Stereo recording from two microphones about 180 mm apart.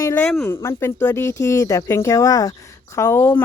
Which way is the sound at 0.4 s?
15° left (ahead or behind).